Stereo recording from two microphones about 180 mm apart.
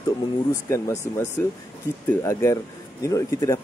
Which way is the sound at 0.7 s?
15° left (ahead or behind).